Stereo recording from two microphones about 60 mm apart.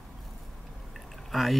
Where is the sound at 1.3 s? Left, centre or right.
Centre.